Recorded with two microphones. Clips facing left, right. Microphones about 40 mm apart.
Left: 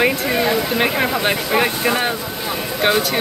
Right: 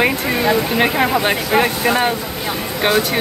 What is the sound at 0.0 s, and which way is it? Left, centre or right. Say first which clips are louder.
Speech: right 1 dB; centre.